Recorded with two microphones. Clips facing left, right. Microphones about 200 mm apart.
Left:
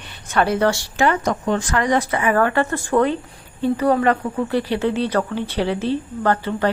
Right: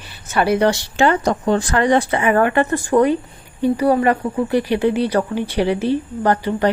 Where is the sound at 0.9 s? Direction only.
30° right (ahead or behind); by 6.6 s 15° right (ahead or behind).